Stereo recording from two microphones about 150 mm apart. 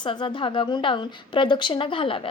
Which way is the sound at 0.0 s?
30° left (ahead or behind).